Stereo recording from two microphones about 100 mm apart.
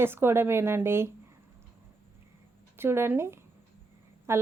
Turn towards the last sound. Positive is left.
turn(degrees=-25)  # may be behind; listen again after turning